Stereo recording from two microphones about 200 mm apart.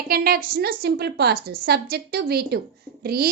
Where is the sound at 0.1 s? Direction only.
50° right (ahead or behind).